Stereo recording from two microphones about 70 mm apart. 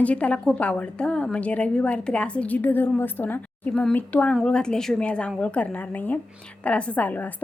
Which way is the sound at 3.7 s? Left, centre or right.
Centre.